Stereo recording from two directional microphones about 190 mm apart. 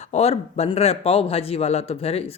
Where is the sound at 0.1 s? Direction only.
35° left (ahead or behind).